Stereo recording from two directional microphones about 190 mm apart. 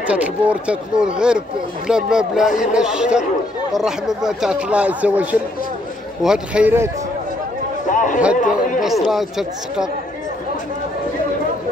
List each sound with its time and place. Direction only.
0.0 s speech: 5° right (ahead or behind)
7.9 s a sound: 40° left (ahead or behind)
8.4 s speech: 45° left (ahead or behind)
8.8 s speech: centre (ahead or behind)